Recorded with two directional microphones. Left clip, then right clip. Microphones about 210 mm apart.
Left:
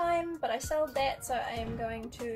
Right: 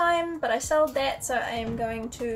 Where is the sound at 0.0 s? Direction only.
Centre (ahead or behind).